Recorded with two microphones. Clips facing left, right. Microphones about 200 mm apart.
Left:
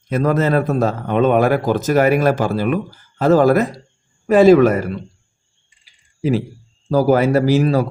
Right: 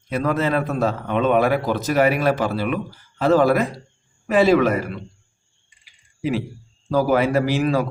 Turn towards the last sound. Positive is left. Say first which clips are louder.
# left 5 dB
turn(degrees=40)  # may be behind; listen again after turning